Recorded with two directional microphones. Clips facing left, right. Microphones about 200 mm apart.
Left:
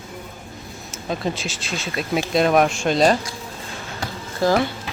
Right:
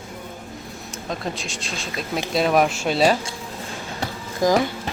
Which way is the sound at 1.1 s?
Centre (ahead or behind).